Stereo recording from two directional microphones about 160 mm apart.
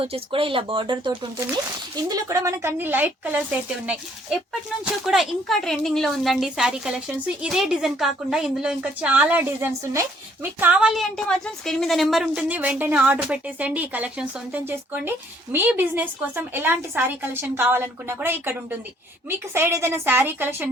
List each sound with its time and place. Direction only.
0.0 s a woman's voice: 35° right (ahead or behind); by 18.5 s 15° right (ahead or behind)
19.5 s a woman's voice: 15° right (ahead or behind)